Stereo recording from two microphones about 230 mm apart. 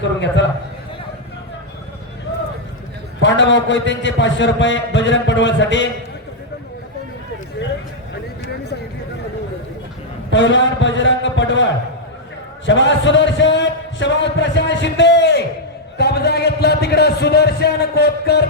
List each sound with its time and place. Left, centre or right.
0.0 s a man's voice: left
3.2 s a man's voice: left
10.3 s a man's voice: left
16.0 s a sound: left